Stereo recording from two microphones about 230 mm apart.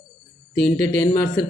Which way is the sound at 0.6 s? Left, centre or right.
Centre.